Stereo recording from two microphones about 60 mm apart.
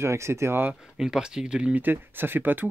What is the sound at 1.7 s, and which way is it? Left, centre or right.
Speech, right.